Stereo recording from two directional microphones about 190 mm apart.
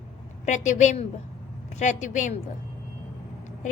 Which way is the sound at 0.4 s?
40° left (ahead or behind).